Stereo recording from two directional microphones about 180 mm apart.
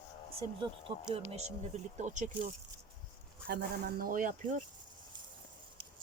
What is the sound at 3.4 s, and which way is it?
Speech, 55° right (ahead or behind).